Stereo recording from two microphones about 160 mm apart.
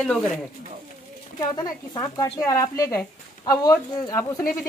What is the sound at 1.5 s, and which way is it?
Speech, 25° left (ahead or behind).